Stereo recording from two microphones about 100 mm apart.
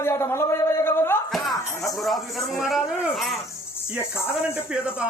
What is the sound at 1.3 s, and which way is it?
Music, centre (ahead or behind).